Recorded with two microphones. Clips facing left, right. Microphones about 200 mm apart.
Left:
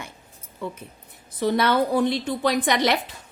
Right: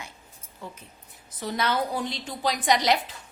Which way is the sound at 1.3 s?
65° left (ahead or behind).